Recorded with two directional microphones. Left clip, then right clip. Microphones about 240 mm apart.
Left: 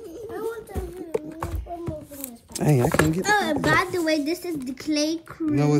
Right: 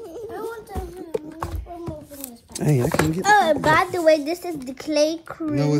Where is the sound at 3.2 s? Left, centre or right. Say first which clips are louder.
Right 5 dB; centre.